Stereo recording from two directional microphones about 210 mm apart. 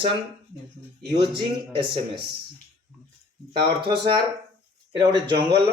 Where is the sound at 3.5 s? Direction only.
25° right (ahead or behind).